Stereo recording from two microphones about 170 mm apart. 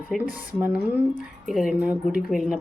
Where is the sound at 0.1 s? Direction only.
10° right (ahead or behind).